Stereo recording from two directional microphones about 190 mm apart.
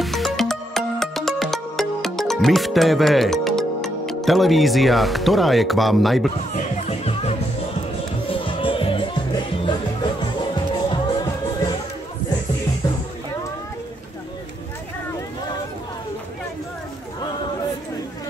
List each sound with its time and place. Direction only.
0.0 s music: centre (ahead or behind)
6.5 s music: 35° left (ahead or behind)